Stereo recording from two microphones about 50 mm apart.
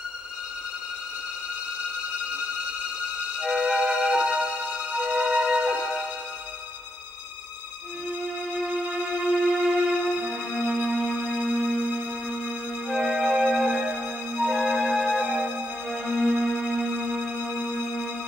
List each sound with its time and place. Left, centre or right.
3.3 s music: centre
9.1 s music: centre
15.9 s music: centre